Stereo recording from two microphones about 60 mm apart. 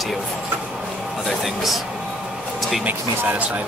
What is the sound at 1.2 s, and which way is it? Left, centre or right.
Speech, centre.